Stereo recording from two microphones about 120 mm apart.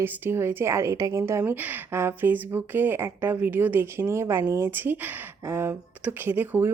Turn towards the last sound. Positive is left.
turn(degrees=-15)  # may be behind; listen again after turning